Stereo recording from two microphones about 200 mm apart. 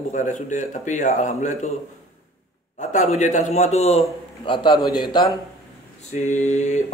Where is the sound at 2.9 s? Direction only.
35° left (ahead or behind).